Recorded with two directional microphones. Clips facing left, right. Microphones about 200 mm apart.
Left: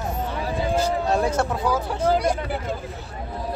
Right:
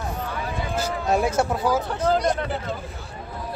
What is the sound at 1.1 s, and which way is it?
Speech, 5° right (ahead or behind).